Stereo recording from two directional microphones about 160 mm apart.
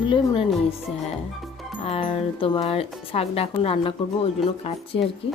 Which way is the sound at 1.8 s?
35° left (ahead or behind).